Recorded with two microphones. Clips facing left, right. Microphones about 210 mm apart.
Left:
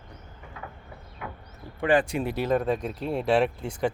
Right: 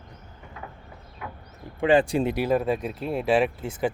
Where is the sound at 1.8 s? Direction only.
25° right (ahead or behind).